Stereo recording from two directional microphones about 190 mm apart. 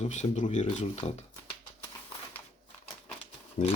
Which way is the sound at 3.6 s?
45° left (ahead or behind).